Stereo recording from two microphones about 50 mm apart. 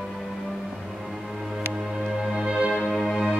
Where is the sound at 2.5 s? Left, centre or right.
Centre.